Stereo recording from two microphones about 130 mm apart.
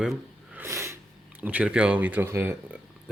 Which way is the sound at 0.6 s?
20° right (ahead or behind).